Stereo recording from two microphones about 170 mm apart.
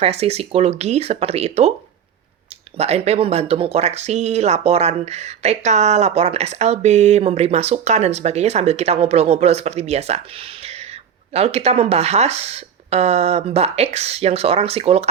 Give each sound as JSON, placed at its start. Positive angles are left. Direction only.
{"t": 0.0, "sound": "speech", "side_deg": -35}
{"t": 2.7, "sound": "speech", "side_deg": -40}
{"t": 11.3, "sound": "speech", "side_deg": -40}